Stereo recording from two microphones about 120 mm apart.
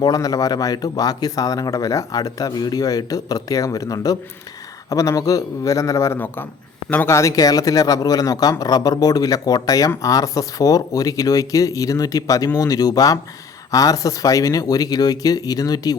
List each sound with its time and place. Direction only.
0.0 s speech: 30° left (ahead or behind)